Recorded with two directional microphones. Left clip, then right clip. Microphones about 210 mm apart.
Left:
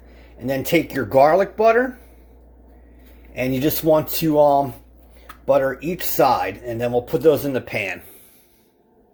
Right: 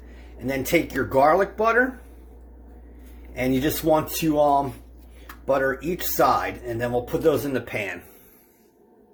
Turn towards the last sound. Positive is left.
turn(degrees=45)  # may be behind; listen again after turning